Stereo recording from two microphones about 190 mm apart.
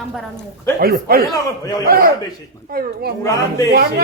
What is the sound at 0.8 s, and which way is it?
Speech, 55° right (ahead or behind).